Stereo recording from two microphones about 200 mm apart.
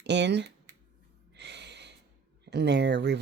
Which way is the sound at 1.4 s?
60° right (ahead or behind).